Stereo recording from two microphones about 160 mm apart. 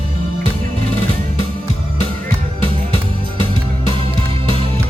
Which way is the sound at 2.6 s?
35° right (ahead or behind).